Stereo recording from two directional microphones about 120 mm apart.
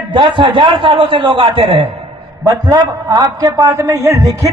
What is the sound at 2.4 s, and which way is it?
A man's voice, 30° right (ahead or behind).